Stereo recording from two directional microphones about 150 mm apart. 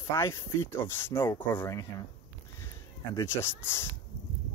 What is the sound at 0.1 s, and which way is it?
Speech, 20° left (ahead or behind).